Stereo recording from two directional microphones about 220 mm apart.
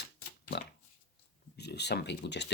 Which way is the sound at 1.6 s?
50° left (ahead or behind).